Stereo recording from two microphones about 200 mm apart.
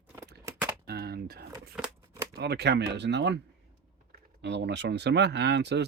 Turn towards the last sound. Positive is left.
turn(degrees=-55)  # may be behind; listen again after turning